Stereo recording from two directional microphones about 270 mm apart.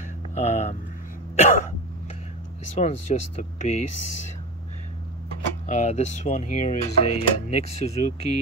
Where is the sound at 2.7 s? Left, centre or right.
Left.